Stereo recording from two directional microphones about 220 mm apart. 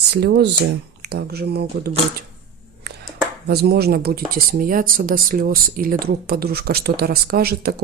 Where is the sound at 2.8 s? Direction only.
50° right (ahead or behind).